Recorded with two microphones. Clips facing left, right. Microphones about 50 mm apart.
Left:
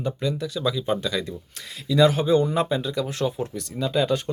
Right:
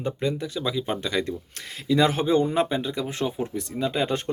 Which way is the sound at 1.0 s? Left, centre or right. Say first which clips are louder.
Right 1 dB; right.